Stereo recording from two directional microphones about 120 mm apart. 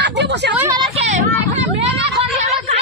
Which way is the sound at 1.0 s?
80° right.